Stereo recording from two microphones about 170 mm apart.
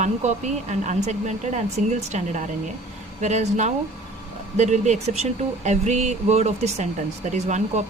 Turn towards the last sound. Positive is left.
turn(degrees=-45)  # may be behind; listen again after turning